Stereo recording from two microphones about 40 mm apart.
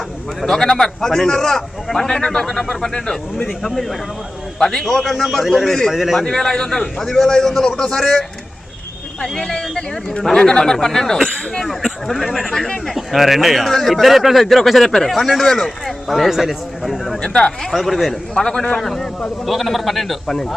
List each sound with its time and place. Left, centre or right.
0.4 s a man's voice: centre
4.6 s a man's voice: centre
5.9 s speech: centre
6.2 s a man's voice: centre
9.2 s a man's voice: centre
10.2 s a man's voice: centre
12.5 s a man's voice: centre
12.9 s speech: centre
13.7 s a man's voice: centre
13.9 s speech: centre
17.2 s speech: centre
17.7 s speech: centre
18.3 s a man's voice: centre